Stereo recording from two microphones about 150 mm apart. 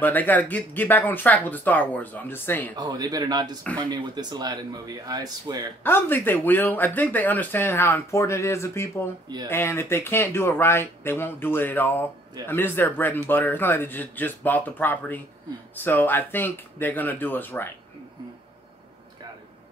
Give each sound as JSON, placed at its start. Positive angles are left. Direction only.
{"t": 0.0, "sound": "speech", "side_deg": 10}
{"t": 2.7, "sound": "a man's voice", "side_deg": -30}
{"t": 5.9, "sound": "speech", "side_deg": 15}